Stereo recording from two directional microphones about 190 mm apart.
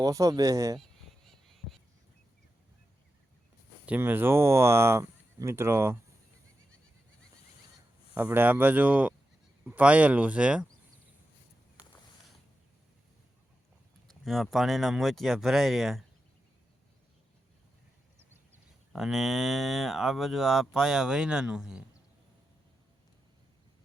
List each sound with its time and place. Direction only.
0.0 s speech: 15° right (ahead or behind)
3.8 s speech: 10° right (ahead or behind)
8.1 s speech: 10° right (ahead or behind)
14.1 s speech: centre (ahead or behind)
18.5 s speech: 5° right (ahead or behind)